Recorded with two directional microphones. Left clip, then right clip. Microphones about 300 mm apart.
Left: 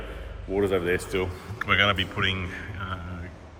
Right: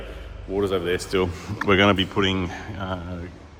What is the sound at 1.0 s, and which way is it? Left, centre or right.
Speech, right.